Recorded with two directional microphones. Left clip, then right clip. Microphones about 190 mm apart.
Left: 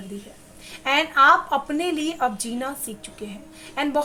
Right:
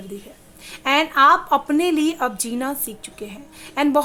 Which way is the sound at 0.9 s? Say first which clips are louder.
Right 2 dB; 35° right (ahead or behind).